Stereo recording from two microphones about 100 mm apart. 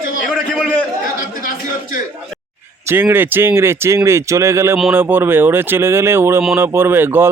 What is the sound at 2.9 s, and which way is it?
A man's voice, 20° right (ahead or behind).